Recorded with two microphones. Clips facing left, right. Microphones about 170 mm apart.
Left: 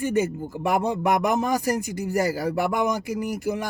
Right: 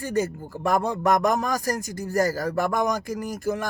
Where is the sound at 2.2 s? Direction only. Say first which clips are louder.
Right 2 dB; 45° right (ahead or behind).